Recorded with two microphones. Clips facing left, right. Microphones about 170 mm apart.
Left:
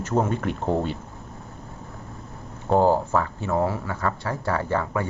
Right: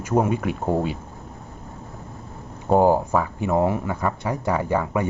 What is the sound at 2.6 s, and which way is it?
Speech, 15° right (ahead or behind).